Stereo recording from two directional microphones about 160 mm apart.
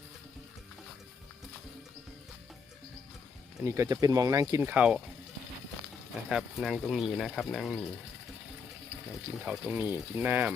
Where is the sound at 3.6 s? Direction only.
15° right (ahead or behind).